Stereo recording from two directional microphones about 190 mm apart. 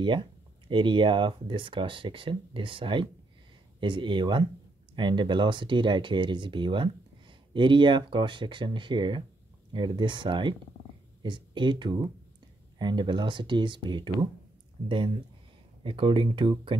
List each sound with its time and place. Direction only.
0.0 s speech: 25° right (ahead or behind)
15.8 s speech: 25° right (ahead or behind)